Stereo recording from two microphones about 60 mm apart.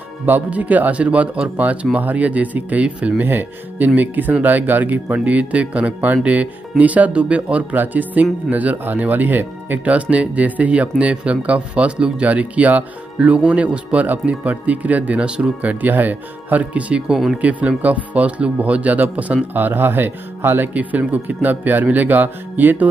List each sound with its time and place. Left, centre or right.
0.3 s speech: right